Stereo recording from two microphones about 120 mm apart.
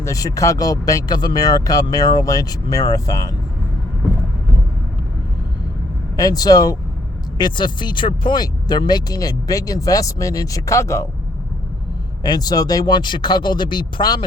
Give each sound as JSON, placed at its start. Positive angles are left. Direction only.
{"t": 0.0, "sound": "speech", "side_deg": 25}
{"t": 6.1, "sound": "speech", "side_deg": 30}
{"t": 12.2, "sound": "speech", "side_deg": 35}